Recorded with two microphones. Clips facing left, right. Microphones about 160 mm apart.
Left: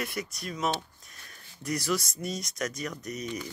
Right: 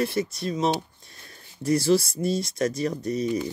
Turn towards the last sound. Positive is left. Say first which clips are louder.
# right 10 dB
turn(degrees=-30)  # may be behind; listen again after turning